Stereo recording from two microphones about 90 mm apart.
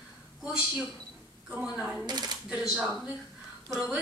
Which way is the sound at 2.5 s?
10° right (ahead or behind).